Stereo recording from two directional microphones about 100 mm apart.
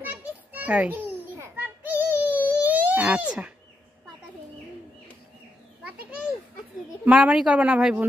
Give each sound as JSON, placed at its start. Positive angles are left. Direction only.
{"t": 0.0, "sound": "children playing", "side_deg": -15}
{"t": 7.1, "sound": "a woman's voice", "side_deg": -10}